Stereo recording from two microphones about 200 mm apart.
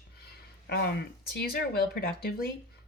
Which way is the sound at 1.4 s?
50° left (ahead or behind).